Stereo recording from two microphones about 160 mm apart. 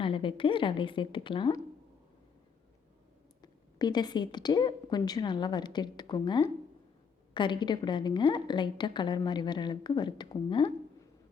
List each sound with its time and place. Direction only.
0.0 s a woman's voice: 30° left (ahead or behind)
3.4 s a woman's voice: 25° left (ahead or behind)